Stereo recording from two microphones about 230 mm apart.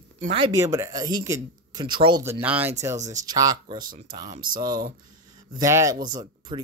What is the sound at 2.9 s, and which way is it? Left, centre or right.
Speech, right.